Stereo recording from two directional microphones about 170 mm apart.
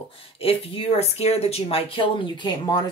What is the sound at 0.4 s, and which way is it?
Speech, 35° left (ahead or behind).